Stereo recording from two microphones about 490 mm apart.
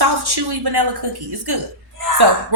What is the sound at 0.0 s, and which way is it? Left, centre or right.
A woman's voice, right.